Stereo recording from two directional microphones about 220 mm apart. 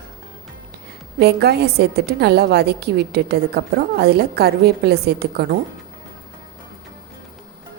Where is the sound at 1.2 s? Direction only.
45° right (ahead or behind).